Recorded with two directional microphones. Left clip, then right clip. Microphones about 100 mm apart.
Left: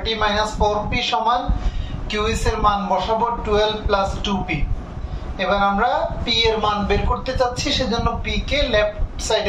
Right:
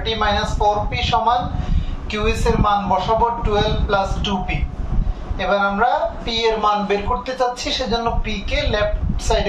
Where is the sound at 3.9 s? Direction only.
25° right (ahead or behind).